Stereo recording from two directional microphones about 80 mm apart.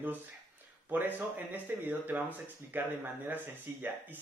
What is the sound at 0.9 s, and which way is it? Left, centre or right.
Speech, right.